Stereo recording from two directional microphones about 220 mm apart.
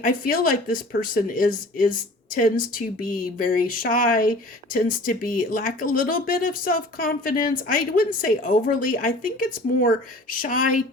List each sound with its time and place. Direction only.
0.0 s speech: 40° left (ahead or behind)